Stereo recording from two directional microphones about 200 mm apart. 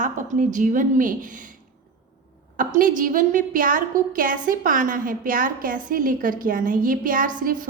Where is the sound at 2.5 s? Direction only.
40° right (ahead or behind).